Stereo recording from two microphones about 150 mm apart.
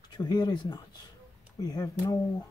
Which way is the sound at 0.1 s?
30° left (ahead or behind).